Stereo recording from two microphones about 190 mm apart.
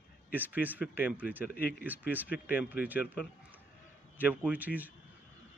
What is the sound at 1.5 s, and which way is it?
Speech, 55° left (ahead or behind).